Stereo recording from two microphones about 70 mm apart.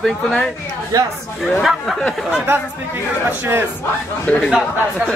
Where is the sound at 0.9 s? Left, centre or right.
Right.